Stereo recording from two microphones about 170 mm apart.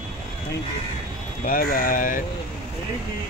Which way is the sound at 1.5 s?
55° left (ahead or behind).